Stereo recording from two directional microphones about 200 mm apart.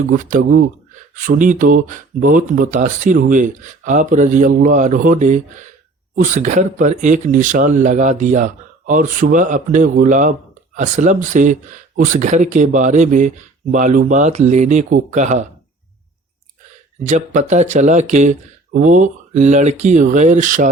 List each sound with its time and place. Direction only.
0.1 s speech: 40° right (ahead or behind)
17.0 s speech: 35° right (ahead or behind)